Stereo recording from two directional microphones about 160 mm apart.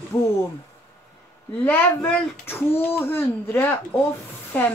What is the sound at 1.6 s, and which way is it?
Speech, 10° left (ahead or behind).